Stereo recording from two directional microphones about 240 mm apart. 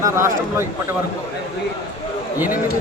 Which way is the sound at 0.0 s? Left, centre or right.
Centre.